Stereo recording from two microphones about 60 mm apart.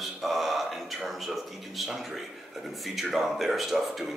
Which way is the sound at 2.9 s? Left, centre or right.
Centre.